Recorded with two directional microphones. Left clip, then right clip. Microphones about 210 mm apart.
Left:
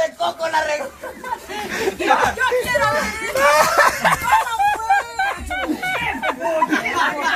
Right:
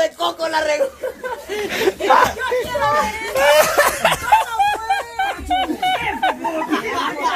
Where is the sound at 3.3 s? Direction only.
15° right (ahead or behind).